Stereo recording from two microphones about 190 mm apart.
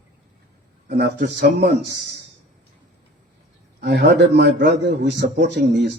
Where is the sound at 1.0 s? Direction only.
65° right (ahead or behind).